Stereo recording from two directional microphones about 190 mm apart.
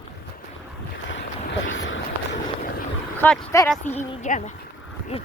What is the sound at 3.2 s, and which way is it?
Speech, 10° left (ahead or behind).